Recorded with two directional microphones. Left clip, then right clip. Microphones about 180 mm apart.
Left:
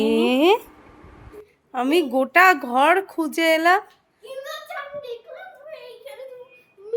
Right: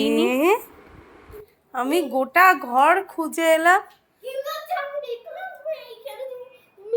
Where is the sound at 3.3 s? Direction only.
25° left (ahead or behind).